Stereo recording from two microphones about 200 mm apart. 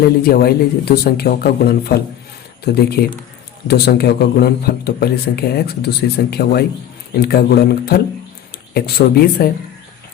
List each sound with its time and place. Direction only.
0.0 s a man's voice: 50° left (ahead or behind)